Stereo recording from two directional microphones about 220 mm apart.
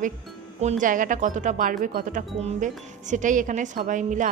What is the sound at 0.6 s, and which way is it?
Speech, 35° right (ahead or behind).